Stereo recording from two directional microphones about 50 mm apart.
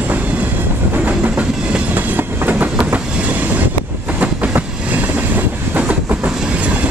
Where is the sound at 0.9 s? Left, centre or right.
Right.